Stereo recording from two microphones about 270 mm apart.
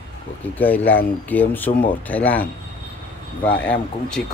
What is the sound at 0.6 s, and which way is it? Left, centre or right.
Speech, centre.